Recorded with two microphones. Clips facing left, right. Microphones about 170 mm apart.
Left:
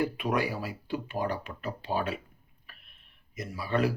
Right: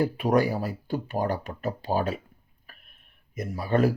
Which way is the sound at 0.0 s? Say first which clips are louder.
Right 6 dB; 40° right (ahead or behind).